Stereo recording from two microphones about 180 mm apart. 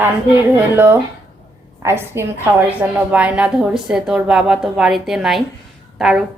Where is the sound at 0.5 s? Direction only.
10° right (ahead or behind).